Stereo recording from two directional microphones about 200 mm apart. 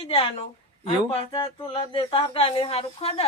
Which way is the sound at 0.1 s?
30° left (ahead or behind).